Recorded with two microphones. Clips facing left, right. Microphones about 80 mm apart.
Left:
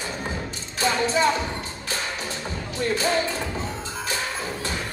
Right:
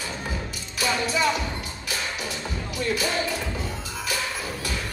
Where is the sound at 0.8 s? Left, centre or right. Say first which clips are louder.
Left 3 dB; left.